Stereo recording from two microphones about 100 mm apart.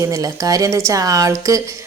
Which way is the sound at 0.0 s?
35° right (ahead or behind).